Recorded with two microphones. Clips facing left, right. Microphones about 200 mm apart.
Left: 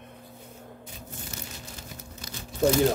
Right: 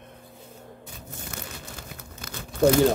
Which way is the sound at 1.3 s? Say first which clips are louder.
Right 2 dB; 55° right (ahead or behind).